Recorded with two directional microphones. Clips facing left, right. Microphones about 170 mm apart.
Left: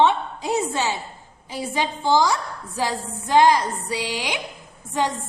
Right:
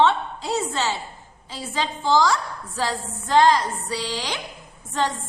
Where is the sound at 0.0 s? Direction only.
15° left (ahead or behind).